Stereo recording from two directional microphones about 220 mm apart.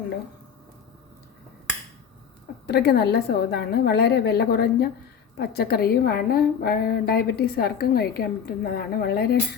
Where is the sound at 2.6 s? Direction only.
45° left (ahead or behind).